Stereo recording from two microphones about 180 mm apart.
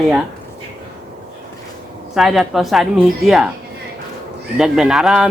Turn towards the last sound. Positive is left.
turn(degrees=0)  # may be behind; listen again after turning